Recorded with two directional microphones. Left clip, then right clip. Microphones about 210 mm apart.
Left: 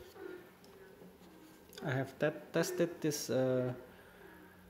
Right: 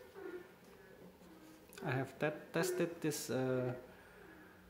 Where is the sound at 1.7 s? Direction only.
10° left (ahead or behind).